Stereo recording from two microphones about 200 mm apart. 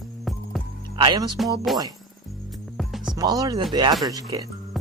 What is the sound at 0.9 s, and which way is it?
Speech, 20° right (ahead or behind).